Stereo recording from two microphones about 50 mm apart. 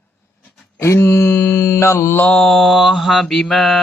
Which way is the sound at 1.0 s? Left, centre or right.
Left.